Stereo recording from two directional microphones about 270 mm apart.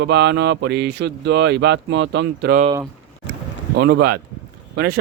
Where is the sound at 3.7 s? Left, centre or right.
Right.